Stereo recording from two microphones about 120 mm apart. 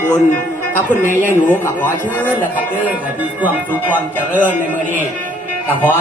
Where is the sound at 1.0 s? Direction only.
90° left.